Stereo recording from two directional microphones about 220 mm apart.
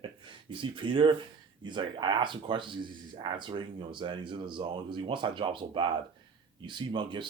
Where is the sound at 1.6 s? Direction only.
20° right (ahead or behind).